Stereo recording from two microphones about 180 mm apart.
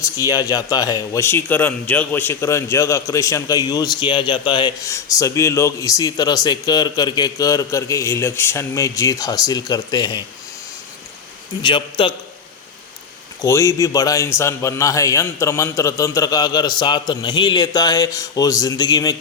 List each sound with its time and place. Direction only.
0.0 s a man's voice: 20° left (ahead or behind)
11.6 s a man's voice: 30° left (ahead or behind)
13.4 s a man's voice: 15° left (ahead or behind)